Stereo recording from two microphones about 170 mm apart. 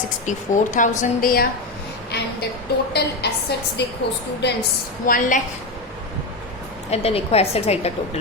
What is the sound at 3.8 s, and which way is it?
Speech, 75° left (ahead or behind).